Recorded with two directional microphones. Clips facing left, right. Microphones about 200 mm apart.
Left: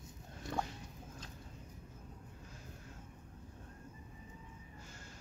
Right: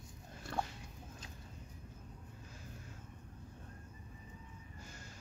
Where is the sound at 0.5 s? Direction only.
10° left (ahead or behind).